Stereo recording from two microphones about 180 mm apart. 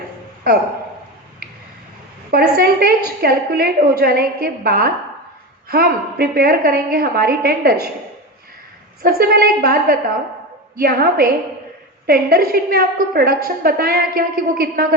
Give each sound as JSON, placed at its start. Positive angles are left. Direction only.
{"t": 0.4, "sound": "speech", "side_deg": -55}
{"t": 2.3, "sound": "a woman's voice", "side_deg": -60}
{"t": 9.0, "sound": "a woman's voice", "side_deg": -60}